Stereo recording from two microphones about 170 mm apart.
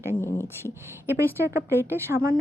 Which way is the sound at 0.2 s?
15° left (ahead or behind).